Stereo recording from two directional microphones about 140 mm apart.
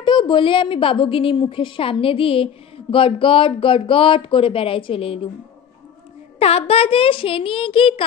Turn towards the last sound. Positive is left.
turn(degrees=40)  # may be behind; listen again after turning